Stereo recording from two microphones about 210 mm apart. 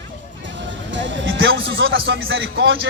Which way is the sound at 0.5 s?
60° right (ahead or behind).